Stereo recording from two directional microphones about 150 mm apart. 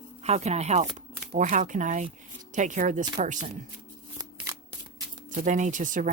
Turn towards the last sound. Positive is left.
turn(degrees=-60)  # may be behind; listen again after turning